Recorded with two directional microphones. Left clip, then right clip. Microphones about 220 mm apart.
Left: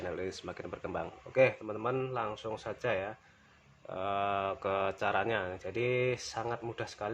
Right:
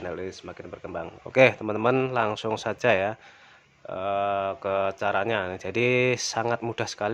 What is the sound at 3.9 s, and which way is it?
Speech, 20° right (ahead or behind).